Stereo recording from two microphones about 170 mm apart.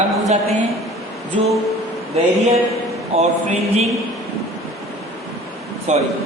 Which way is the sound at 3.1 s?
35° right (ahead or behind).